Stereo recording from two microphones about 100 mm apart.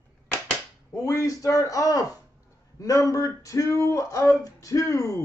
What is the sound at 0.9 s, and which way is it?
Speech, 35° left (ahead or behind).